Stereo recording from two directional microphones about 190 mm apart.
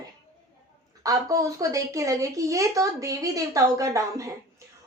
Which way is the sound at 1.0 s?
20° right (ahead or behind).